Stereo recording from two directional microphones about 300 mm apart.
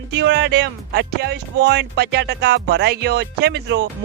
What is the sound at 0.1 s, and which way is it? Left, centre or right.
Speech, right.